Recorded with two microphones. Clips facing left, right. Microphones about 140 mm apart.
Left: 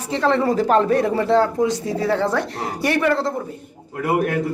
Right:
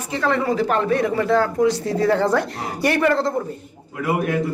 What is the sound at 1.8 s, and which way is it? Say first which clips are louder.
Speech: right 2 dB; 5° left (ahead or behind).